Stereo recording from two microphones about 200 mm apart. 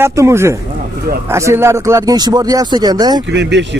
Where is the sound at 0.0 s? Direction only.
15° right (ahead or behind).